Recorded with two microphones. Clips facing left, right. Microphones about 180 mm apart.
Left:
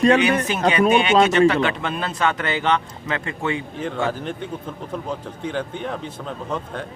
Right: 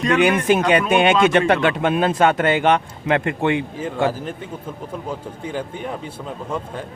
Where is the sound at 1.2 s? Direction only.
55° right (ahead or behind).